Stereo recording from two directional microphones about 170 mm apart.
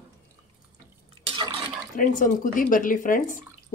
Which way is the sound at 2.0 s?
50° left (ahead or behind).